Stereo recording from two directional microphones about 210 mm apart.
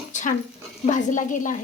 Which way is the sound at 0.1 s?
35° left (ahead or behind).